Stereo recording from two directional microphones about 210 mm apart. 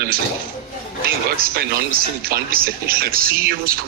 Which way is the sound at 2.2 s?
45° right (ahead or behind).